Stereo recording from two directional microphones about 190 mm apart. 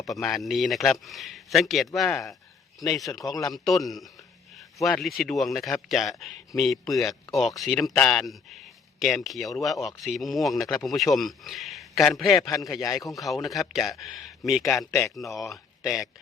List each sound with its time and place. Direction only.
0.0 s a man's voice: centre (ahead or behind)
3.1 s speech: 20° left (ahead or behind)
3.5 s a man's voice: centre (ahead or behind)
6.5 s speech: 15° left (ahead or behind)
7.3 s a man's voice: centre (ahead or behind)
12.5 s speech: 20° left (ahead or behind)
13.1 s a man's voice: centre (ahead or behind)
14.6 s speech: 15° left (ahead or behind)
15.8 s speech: centre (ahead or behind)